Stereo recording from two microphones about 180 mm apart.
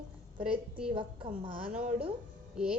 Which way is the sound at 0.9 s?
30° right (ahead or behind).